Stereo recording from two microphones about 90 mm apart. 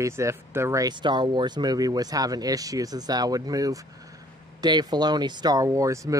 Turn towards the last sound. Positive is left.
turn(degrees=-35)  # may be behind; listen again after turning